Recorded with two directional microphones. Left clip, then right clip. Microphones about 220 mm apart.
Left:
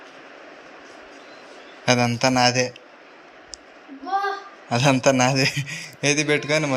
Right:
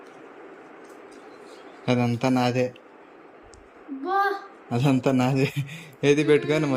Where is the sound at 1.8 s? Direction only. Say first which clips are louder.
Left 5 dB; 10° right (ahead or behind).